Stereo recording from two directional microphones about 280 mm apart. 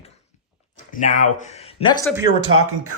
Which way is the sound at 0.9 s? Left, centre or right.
Left.